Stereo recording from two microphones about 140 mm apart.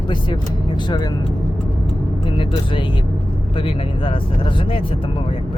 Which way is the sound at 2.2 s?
35° left (ahead or behind).